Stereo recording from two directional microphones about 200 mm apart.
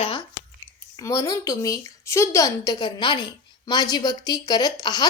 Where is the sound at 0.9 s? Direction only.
15° left (ahead or behind).